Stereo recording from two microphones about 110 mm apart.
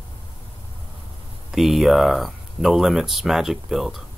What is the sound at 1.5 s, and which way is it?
Speech, centre (ahead or behind).